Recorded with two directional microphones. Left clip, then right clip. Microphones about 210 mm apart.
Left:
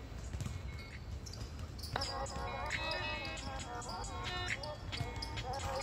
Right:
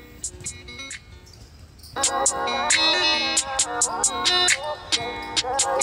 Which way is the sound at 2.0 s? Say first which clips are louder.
Right 18 dB; 55° right (ahead or behind).